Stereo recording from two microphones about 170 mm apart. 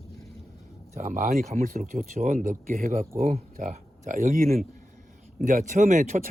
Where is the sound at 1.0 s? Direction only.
50° right (ahead or behind).